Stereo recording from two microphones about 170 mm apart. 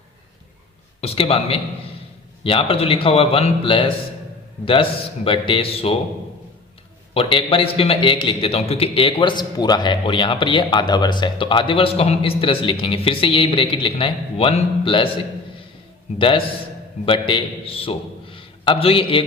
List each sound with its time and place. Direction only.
1.0 s a man's voice: 35° left (ahead or behind)
7.1 s a man's voice: 30° left (ahead or behind)
16.1 s a man's voice: 30° left (ahead or behind)